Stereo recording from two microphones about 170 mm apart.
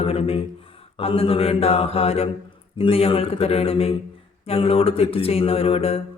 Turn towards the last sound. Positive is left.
turn(degrees=35)  # may be behind; listen again after turning